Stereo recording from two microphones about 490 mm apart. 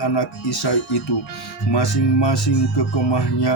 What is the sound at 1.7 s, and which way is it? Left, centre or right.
Speech, left.